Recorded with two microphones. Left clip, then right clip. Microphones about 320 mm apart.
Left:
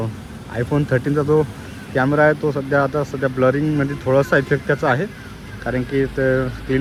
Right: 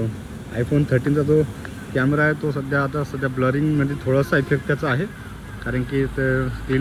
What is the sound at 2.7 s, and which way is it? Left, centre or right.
Speech, left.